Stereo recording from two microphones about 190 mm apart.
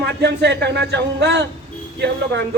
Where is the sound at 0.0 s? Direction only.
60° right (ahead or behind).